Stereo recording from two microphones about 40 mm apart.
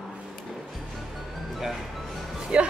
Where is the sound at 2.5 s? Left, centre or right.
Right.